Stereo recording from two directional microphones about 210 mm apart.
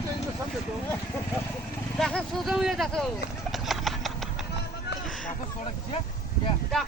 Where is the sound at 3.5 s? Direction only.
Centre (ahead or behind).